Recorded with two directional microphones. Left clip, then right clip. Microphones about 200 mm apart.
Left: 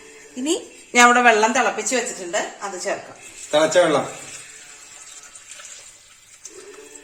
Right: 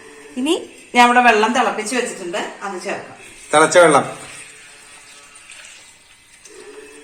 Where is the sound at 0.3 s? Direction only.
15° left (ahead or behind).